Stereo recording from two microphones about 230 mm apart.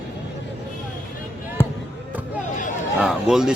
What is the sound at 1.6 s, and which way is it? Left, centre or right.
Basketball bounce, centre.